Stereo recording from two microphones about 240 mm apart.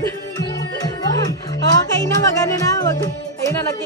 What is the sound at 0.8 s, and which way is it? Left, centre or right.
Music, centre.